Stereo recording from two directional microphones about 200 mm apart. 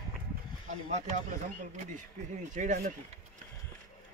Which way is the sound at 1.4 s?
40° right (ahead or behind).